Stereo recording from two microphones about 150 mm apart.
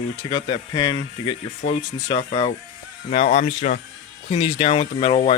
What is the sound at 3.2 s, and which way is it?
Speech, 70° left (ahead or behind).